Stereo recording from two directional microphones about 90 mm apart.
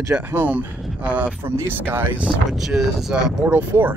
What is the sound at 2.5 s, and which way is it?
Speech, centre (ahead or behind).